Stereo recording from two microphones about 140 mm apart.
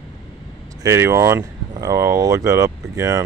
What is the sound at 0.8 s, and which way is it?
Speech, 20° right (ahead or behind).